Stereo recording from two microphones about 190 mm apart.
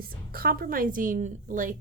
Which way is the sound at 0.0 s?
50° right (ahead or behind).